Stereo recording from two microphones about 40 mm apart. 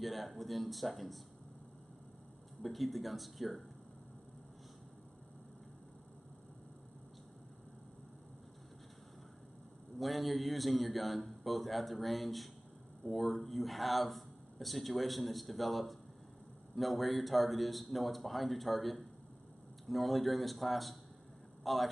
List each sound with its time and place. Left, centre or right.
0.0 s speech: centre
2.6 s speech: centre
9.9 s speech: centre